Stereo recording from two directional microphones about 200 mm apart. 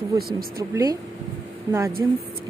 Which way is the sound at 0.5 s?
15° right (ahead or behind).